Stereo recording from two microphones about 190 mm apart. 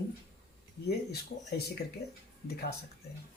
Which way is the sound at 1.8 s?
55° left (ahead or behind).